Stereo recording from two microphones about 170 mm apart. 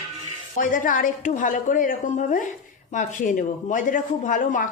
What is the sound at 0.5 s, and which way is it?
Speech, 50° left (ahead or behind).